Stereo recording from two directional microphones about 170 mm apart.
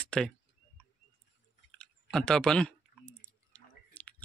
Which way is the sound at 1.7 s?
5° left (ahead or behind).